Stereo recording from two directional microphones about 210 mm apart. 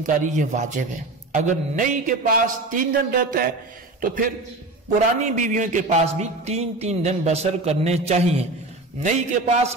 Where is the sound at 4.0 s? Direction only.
40° right (ahead or behind).